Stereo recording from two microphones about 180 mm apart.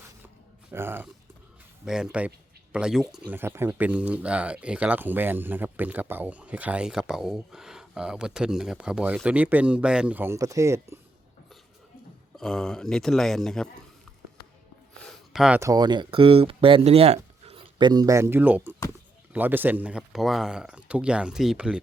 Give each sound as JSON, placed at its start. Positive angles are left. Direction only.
{"t": 0.7, "sound": "speech", "side_deg": -10}
{"t": 12.4, "sound": "speech", "side_deg": 5}
{"t": 15.0, "sound": "a sound", "side_deg": 0}
{"t": 15.6, "sound": "speech", "side_deg": -20}